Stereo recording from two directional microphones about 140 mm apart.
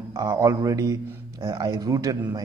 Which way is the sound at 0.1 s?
25° right (ahead or behind).